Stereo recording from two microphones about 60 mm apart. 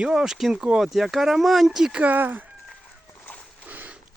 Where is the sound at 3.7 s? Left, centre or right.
Right.